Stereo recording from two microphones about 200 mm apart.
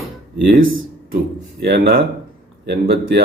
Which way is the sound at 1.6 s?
50° right (ahead or behind).